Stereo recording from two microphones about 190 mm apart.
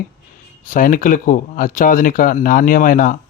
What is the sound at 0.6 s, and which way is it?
A man's voice, 45° left (ahead or behind).